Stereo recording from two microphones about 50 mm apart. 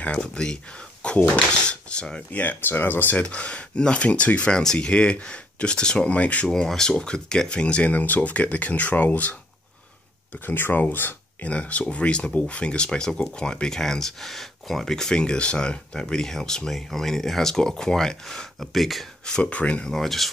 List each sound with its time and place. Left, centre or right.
0.2 s speech: centre
2.3 s speech: left
3.2 s speech: left
6.5 s speech: centre; by 9.3 s left
10.4 s speech: left
11.4 s speech: left; by 19.0 s centre
19.2 s speech: left
19.9 s speech: centre